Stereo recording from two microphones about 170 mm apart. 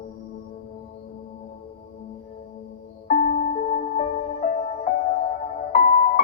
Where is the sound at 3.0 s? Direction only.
50° left (ahead or behind).